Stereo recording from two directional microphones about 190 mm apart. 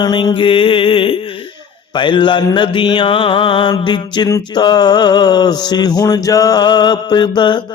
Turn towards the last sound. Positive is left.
turn(degrees=25)  # may be behind; listen again after turning